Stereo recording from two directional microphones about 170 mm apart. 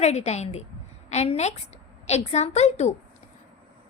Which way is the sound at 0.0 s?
40° left (ahead or behind).